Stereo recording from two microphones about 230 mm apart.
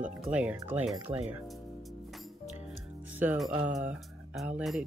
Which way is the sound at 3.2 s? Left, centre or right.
Centre.